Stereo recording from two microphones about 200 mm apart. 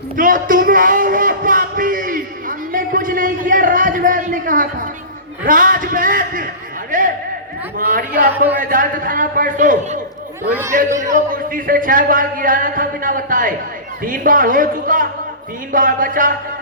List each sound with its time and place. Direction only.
0.2 s a sound: 40° right (ahead or behind)
5.5 s speech: 45° right (ahead or behind)
6.9 s a sound: 40° right (ahead or behind)
7.8 s speech: 45° right (ahead or behind)
10.5 s speech: 10° right (ahead or behind)
11.1 s speech: 40° right (ahead or behind)
15.7 s music: 40° right (ahead or behind)